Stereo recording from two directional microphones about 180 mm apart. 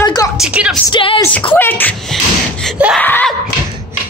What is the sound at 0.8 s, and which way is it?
Speech, 25° left (ahead or behind).